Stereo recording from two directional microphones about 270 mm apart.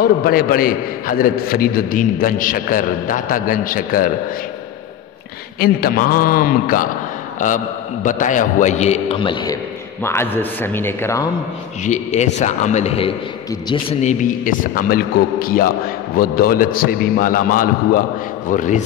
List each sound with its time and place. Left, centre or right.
0.0 s a man's voice: left
5.6 s a man's voice: left; by 11.2 s centre
11.8 s a man's voice: left